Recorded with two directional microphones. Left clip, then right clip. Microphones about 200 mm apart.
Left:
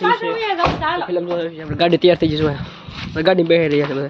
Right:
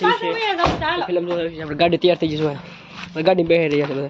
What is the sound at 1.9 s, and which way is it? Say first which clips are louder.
Speech: left 4 dB; 15° left (ahead or behind).